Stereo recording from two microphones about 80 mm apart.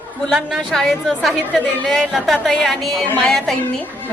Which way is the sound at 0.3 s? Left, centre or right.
Centre.